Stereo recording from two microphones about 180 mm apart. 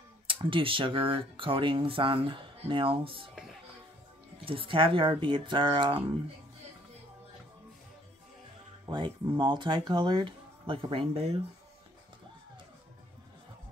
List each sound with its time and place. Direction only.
0.3 s speech: 30° right (ahead or behind)
4.5 s speech: 30° right (ahead or behind)
8.8 s speech: 25° right (ahead or behind)